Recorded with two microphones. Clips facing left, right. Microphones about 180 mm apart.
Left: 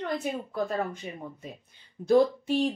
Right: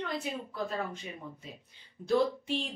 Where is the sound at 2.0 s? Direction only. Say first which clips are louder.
Left 6 dB; 45° left (ahead or behind).